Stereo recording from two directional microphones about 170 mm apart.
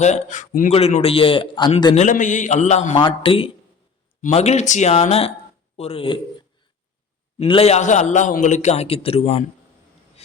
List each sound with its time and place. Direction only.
0.0 s speech: 45° left (ahead or behind)
0.7 s a man's voice: 35° left (ahead or behind)
2.0 s speech: 50° left (ahead or behind)
3.0 s a man's voice: 30° left (ahead or behind)
7.3 s a man's voice: 35° left (ahead or behind)
10.2 s writing: 35° left (ahead or behind)